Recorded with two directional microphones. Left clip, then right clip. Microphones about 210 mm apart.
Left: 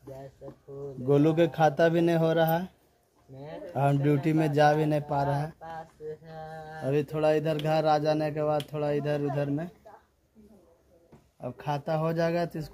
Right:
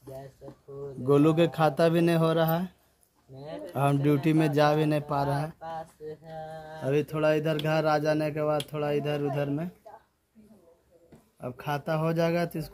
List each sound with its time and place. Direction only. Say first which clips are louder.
1.0 s speech: right 1 dB; 5° right (ahead or behind)
3.4 s speech: right 2 dB; 25° right (ahead or behind)
3.7 s speech: even; 5° right (ahead or behind)
6.3 s mantra: right 1 dB; 30° right (ahead or behind)
6.8 s speech: even; 15° right (ahead or behind)
11.4 s speech: even; 10° right (ahead or behind)